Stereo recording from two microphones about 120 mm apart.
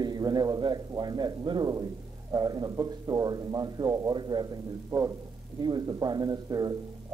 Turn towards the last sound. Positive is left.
turn(degrees=-30)  # may be behind; listen again after turning